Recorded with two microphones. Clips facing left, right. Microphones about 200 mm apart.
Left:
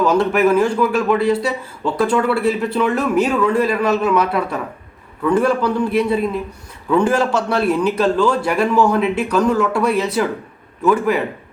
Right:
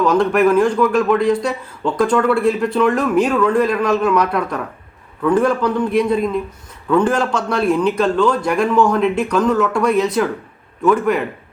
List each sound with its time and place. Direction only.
0.0 s a man's voice: 5° left (ahead or behind)